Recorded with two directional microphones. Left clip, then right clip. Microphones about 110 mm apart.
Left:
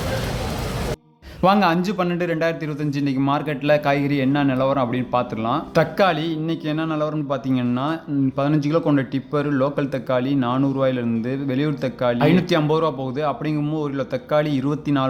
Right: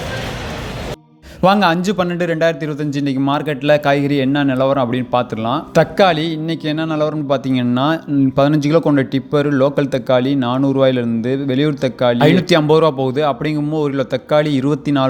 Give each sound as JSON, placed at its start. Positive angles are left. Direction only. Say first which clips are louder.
{"t": 1.4, "sound": "speech", "louder": "right 4 dB", "side_deg": -35}
{"t": 8.4, "sound": "speech", "louder": "right 7 dB", "side_deg": -45}